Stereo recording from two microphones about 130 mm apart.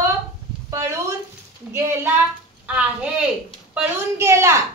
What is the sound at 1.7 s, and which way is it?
Speech, 20° right (ahead or behind).